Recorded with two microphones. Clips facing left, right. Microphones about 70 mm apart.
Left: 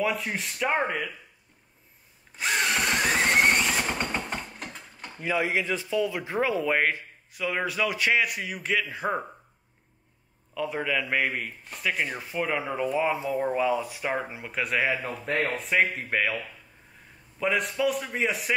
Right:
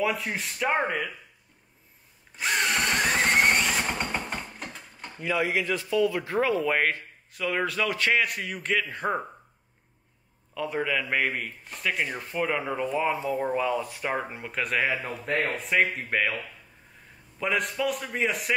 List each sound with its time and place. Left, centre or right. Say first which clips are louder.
0.0 s a man's voice: even; centre
2.3 s drill: even; centre
5.2 s speech: even; left; by 9.2 s centre
10.5 s a man's voice: even; centre